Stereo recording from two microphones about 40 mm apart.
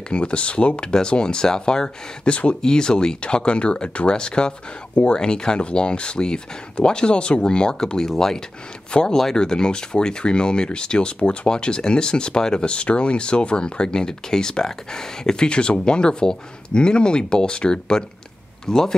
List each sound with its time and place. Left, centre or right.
0.1 s speech: left
2.6 s speech: centre
9.4 s speech: centre